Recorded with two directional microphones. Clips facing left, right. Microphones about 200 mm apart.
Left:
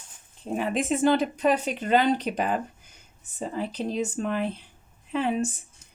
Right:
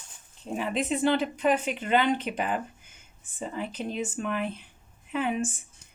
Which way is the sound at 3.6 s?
35° left (ahead or behind).